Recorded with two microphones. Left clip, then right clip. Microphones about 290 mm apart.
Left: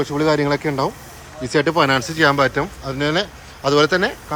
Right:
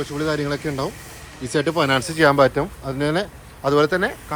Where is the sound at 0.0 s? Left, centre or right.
Centre.